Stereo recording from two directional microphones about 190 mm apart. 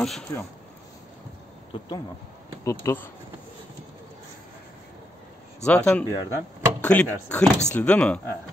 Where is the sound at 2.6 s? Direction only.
15° left (ahead or behind).